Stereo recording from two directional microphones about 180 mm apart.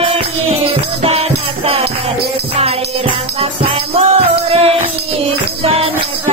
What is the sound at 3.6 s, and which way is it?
Music, 35° right (ahead or behind).